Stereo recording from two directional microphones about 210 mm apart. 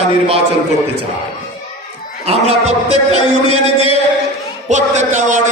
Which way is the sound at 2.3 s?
30° right (ahead or behind).